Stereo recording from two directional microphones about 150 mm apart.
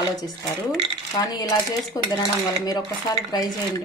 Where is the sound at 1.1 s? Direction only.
25° left (ahead or behind).